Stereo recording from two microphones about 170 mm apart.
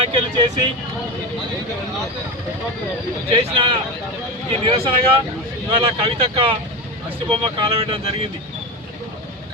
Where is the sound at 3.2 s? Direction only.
30° right (ahead or behind).